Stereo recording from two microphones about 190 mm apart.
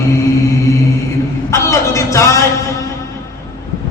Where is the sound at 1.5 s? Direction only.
15° left (ahead or behind).